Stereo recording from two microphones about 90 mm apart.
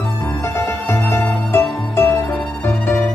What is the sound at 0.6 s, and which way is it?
Music, 30° left (ahead or behind).